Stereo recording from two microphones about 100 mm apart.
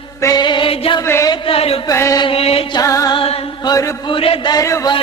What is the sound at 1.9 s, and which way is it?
Chant, 30° left (ahead or behind).